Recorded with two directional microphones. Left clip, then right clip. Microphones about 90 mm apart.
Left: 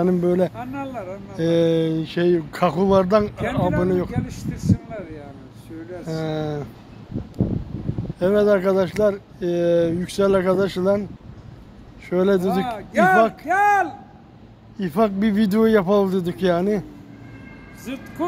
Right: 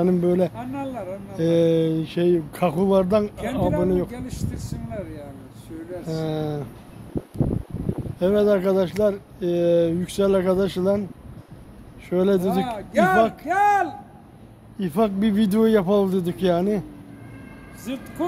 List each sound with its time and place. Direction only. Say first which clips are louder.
0.2 s speech: left 1 dB; 20° right (ahead or behind)
0.6 s speech: left 1 dB; 15° left (ahead or behind)
1.3 s speech: even; 30° right (ahead or behind)
4.1 s speech: left 3 dB; 15° left (ahead or behind)
6.0 s speech: left 1 dB; 20° right (ahead or behind)
8.2 s speech: left 2 dB; 25° right (ahead or behind)
12.1 s speech: left 2 dB; 20° right (ahead or behind)
12.4 s speech: left 1 dB; 20° left (ahead or behind)
15.0 s speech: left 2 dB; 20° right (ahead or behind)
17.9 s speech: right 1 dB; 5° left (ahead or behind)